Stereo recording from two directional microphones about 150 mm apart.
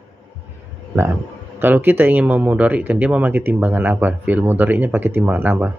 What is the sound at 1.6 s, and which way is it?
Speech, 15° right (ahead or behind).